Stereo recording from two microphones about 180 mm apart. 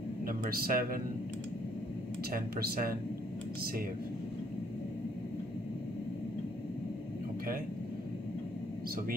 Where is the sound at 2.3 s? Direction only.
55° right (ahead or behind).